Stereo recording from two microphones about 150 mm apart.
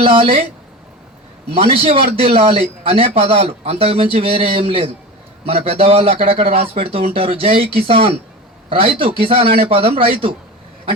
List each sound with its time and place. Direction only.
0.0 s speech: 35° right (ahead or behind)
1.5 s speech: 40° right (ahead or behind)